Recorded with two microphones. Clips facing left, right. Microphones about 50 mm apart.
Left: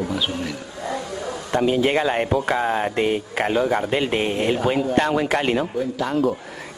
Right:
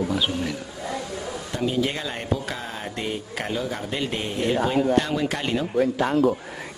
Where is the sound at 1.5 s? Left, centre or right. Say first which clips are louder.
Left 7 dB; left.